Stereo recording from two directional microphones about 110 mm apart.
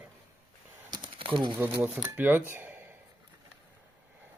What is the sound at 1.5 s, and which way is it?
Speech, 20° right (ahead or behind).